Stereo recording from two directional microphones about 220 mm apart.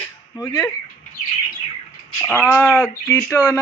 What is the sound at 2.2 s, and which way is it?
Speech, 5° left (ahead or behind).